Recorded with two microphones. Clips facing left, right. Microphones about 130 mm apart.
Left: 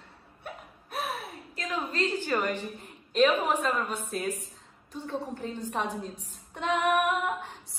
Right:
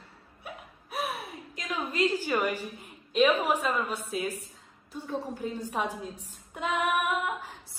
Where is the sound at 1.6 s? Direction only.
15° right (ahead or behind).